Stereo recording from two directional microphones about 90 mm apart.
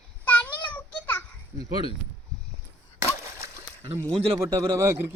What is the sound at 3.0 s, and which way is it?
Splash, 35° right (ahead or behind).